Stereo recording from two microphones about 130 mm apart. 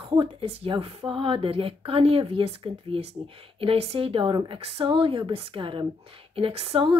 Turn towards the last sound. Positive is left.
turn(degrees=-45)  # may be behind; listen again after turning